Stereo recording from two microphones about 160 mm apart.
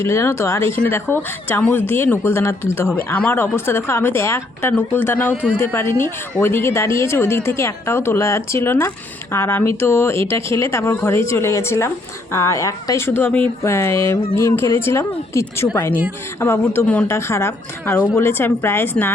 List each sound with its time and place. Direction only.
0.0 s speech: 15° left (ahead or behind)